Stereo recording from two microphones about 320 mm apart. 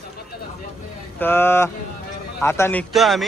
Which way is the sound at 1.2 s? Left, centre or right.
Centre.